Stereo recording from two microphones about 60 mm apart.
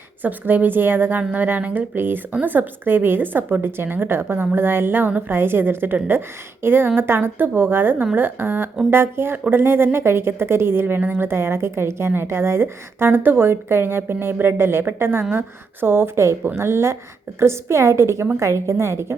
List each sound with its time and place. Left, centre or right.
0.2 s a woman's voice: right